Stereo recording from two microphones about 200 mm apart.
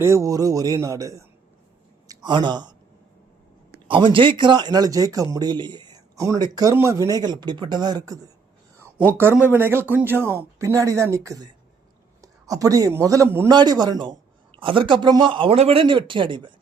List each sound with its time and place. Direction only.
0.0 s speech: 15° right (ahead or behind)
3.8 s speech: 25° right (ahead or behind)